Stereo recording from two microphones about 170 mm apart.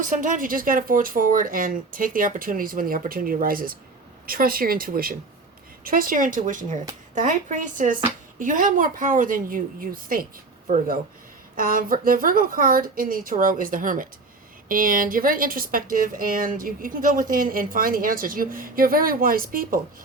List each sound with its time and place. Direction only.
0.0 s a woman's voice: 50° right (ahead or behind)